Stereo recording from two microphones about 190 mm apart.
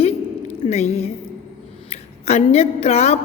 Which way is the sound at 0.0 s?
35° left (ahead or behind).